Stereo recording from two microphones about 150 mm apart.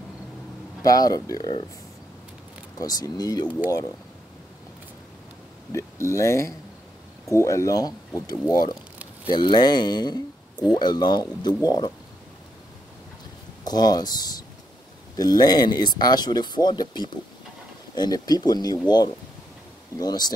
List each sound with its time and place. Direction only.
0.8 s speech: 25° left (ahead or behind)
2.8 s speech: 25° left (ahead or behind)
5.7 s speech: 20° left (ahead or behind)
13.7 s speech: 25° left (ahead or behind)
20.0 s speech: 25° left (ahead or behind)